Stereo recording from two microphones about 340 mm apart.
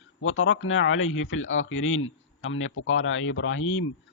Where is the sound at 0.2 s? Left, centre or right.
Left.